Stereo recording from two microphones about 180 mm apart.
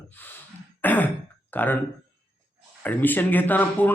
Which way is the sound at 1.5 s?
10° left (ahead or behind).